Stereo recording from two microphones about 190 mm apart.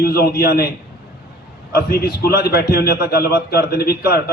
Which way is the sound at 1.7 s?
55° left (ahead or behind).